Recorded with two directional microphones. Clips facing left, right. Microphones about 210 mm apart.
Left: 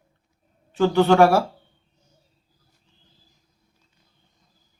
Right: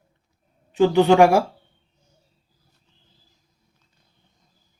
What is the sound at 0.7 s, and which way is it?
Speech, 15° right (ahead or behind).